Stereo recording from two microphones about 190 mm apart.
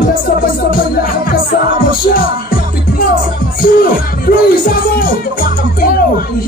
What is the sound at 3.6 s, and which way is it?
Music, 50° left (ahead or behind).